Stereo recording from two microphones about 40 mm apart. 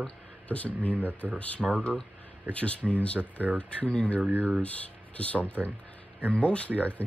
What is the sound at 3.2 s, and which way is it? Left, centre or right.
Speech, right.